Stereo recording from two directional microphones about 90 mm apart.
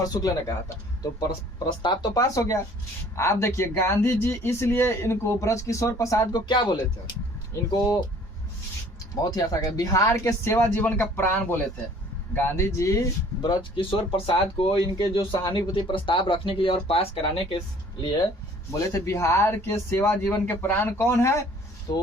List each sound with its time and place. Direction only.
0.0 s speech: 45° left (ahead or behind)
2.1 s speech: 40° left (ahead or behind)
6.4 s speech: 60° left (ahead or behind)
7.7 s speech: 40° left (ahead or behind)
9.2 s speech: 45° left (ahead or behind)
13.4 s speech: 50° left (ahead or behind)
13.7 s speech: 75° left (ahead or behind); by 17.1 s 90° left
18.7 s speech: 35° left (ahead or behind)
21.9 s speech: 45° left (ahead or behind)